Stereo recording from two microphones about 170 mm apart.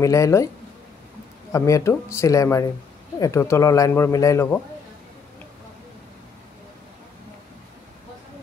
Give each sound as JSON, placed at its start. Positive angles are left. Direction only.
{"t": 0.0, "sound": "speech", "side_deg": 20}
{"t": 1.5, "sound": "speech", "side_deg": 15}